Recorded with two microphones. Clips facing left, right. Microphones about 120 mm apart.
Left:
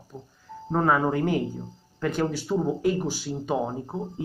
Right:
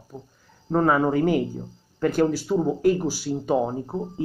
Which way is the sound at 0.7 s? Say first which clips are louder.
Right 3 dB; centre (ahead or behind).